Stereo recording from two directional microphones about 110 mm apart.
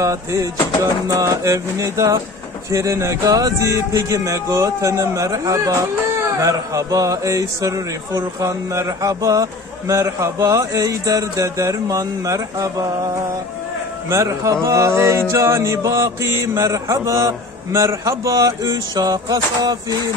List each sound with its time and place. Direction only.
0.0 s speech: 30° right (ahead or behind)
1.0 s music: 30° right (ahead or behind)
2.7 s speech: 30° right (ahead or behind)